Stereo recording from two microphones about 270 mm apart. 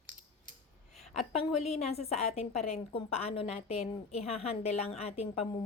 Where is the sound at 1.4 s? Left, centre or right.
Left.